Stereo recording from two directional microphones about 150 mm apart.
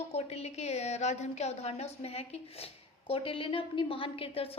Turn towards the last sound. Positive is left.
turn(degrees=40)  # may be behind; listen again after turning